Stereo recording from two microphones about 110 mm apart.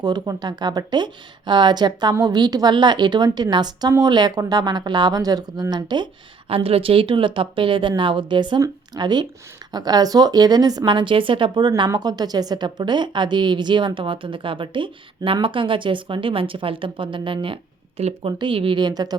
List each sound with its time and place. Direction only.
0.0 s a woman's voice: 40° right (ahead or behind)
6.5 s a woman's voice: 60° right (ahead or behind); by 19.1 s 40° right (ahead or behind)